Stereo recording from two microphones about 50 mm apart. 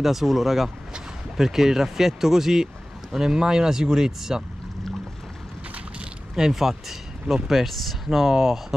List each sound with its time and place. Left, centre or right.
0.0 s speech: centre
6.3 s speech: centre